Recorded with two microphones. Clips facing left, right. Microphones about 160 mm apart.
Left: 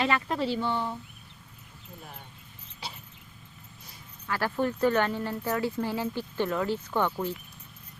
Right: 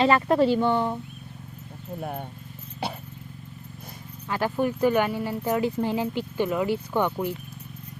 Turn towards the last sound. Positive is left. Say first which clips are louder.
# right 3 dB
turn(degrees=-15)  # may be behind; listen again after turning